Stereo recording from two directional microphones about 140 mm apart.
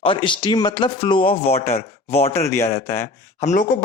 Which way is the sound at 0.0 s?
35° left (ahead or behind).